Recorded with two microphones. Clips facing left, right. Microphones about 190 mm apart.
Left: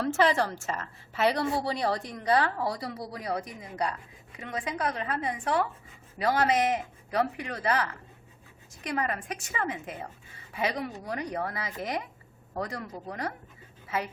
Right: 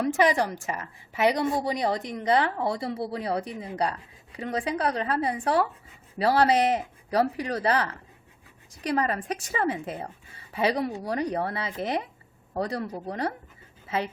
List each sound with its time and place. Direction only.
0.0 s a woman's voice: 15° right (ahead or behind); by 13.3 s 30° right (ahead or behind)